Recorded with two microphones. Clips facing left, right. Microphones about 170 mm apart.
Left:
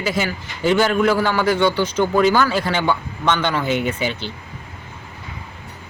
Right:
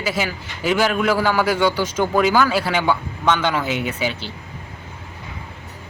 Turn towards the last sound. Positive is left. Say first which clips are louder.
# left 1 dB
turn(degrees=-5)  # may be behind; listen again after turning